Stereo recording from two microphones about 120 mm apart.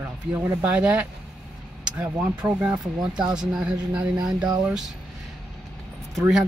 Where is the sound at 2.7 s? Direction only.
35° right (ahead or behind).